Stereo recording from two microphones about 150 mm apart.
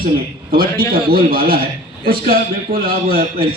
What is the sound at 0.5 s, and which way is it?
A man's voice, 80° right.